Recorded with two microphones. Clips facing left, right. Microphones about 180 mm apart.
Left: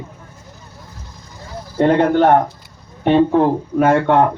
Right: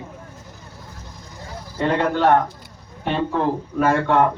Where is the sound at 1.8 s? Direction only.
50° left (ahead or behind).